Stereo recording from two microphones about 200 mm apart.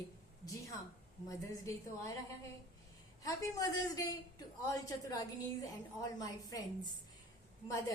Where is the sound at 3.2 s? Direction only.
15° left (ahead or behind).